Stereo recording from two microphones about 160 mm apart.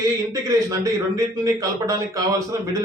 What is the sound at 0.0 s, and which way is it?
Speech, 20° right (ahead or behind).